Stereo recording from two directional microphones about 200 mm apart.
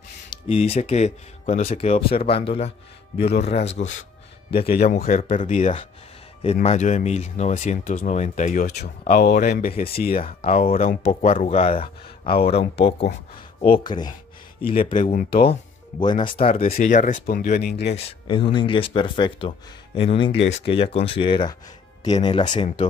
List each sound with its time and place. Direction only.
0.3 s speech: 30° left (ahead or behind)
5.0 s speech: 35° left (ahead or behind)
8.6 s speech: 55° left (ahead or behind)
10.1 s speech: 30° left (ahead or behind)
16.7 s speech: 40° left (ahead or behind)
17.9 s speech: 25° left (ahead or behind)